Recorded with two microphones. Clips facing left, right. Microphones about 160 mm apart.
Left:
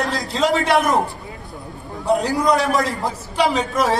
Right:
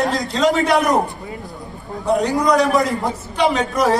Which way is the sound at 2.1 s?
Centre (ahead or behind).